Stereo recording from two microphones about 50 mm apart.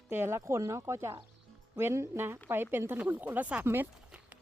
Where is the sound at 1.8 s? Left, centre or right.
Right.